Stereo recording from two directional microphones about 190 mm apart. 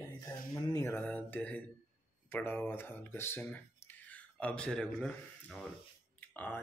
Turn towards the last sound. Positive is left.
turn(degrees=10)  # may be behind; listen again after turning